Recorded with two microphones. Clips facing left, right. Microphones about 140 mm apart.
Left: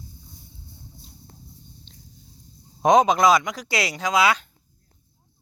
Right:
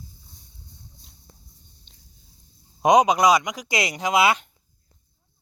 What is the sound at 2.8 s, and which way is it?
Speech, 10° right (ahead or behind).